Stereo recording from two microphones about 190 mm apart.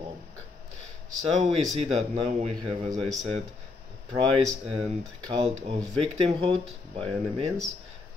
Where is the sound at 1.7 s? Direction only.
35° right (ahead or behind).